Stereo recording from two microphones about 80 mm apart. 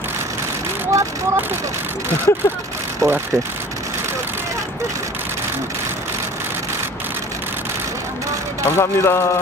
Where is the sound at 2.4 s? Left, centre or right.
Left.